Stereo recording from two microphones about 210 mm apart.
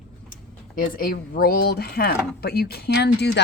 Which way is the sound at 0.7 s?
40° left (ahead or behind).